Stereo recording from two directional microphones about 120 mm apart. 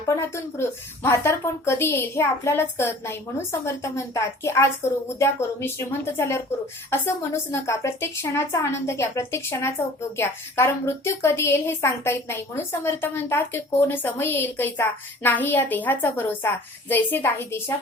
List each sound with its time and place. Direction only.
0.0 s a woman's voice: 25° left (ahead or behind)